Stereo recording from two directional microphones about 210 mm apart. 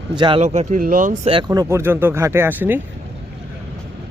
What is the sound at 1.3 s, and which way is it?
A man's voice, 20° right (ahead or behind).